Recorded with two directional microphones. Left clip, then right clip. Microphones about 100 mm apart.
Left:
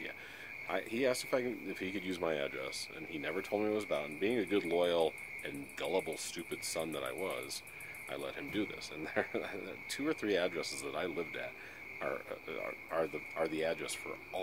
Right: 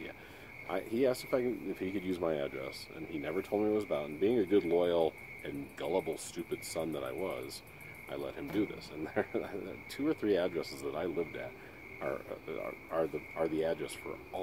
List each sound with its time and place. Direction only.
0.7 s speech: 20° left (ahead or behind)
13.4 s speech: 15° left (ahead or behind)